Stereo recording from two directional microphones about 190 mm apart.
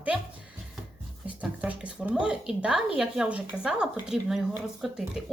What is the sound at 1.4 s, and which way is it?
Speech, 5° right (ahead or behind).